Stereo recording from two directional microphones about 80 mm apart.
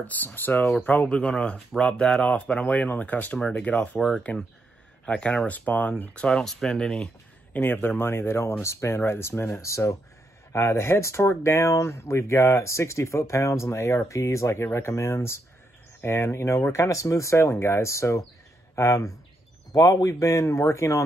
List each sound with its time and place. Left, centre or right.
0.0 s speech: left; by 7.1 s centre
7.5 s speech: left